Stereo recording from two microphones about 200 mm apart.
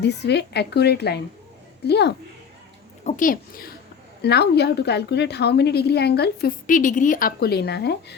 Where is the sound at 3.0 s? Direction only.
40° left (ahead or behind).